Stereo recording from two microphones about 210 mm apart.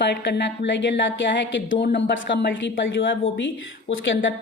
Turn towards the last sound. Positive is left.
turn(degrees=65)  # may be behind; listen again after turning